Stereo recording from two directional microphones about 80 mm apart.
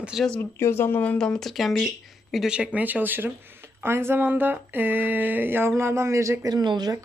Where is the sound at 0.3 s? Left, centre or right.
Left; by 2.8 s centre.